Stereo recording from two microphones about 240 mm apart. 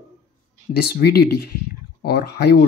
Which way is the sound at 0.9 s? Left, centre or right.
Left.